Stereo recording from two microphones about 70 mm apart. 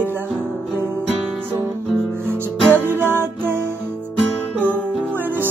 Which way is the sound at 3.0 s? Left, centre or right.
Right.